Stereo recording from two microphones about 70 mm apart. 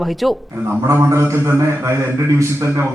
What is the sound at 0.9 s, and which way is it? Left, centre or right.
A man's voice, right.